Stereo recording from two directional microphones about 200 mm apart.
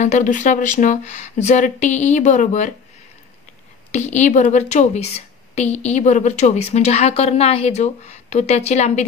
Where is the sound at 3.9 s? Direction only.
35° left (ahead or behind).